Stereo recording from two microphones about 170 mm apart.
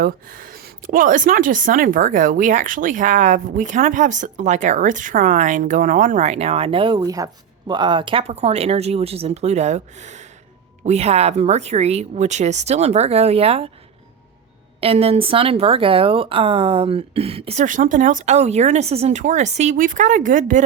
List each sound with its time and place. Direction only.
0.0 s a woman's voice: 55° right (ahead or behind); by 13.7 s 35° right (ahead or behind)
14.8 s speech: 35° right (ahead or behind)